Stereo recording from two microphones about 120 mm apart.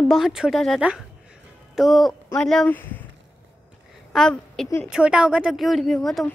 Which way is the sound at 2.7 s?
15° left (ahead or behind).